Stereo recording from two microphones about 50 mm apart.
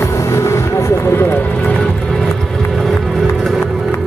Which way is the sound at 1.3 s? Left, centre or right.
Left.